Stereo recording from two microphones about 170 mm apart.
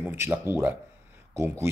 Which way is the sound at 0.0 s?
10° right (ahead or behind).